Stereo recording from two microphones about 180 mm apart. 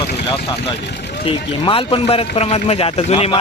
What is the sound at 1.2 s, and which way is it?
A man's voice, 30° left (ahead or behind).